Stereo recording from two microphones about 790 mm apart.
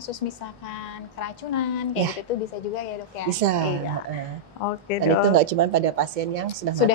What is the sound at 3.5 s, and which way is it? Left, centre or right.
Speech, right.